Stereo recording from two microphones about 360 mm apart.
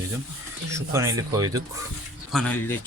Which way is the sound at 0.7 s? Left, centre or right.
Centre.